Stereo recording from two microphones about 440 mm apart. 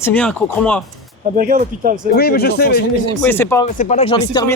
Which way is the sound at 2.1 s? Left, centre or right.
Left.